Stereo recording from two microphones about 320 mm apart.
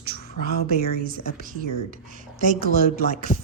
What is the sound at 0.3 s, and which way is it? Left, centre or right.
Speech, left.